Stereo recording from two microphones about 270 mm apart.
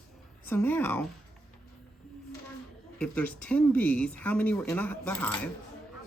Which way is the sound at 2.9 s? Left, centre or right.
Centre.